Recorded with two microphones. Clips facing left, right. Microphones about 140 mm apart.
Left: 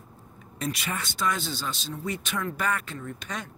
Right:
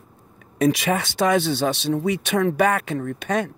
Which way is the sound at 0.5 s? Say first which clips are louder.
Right 12 dB; 85° right.